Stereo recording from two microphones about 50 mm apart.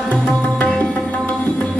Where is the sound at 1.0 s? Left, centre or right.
Left.